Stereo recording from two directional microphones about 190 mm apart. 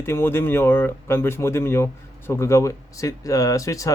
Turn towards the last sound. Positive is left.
turn(degrees=15)  # may be behind; listen again after turning